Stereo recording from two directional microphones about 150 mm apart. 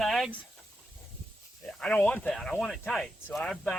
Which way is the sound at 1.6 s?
10° left (ahead or behind).